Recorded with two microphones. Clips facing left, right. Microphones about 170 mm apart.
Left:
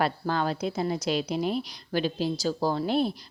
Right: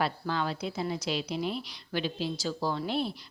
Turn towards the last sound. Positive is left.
turn(degrees=45)  # may be behind; listen again after turning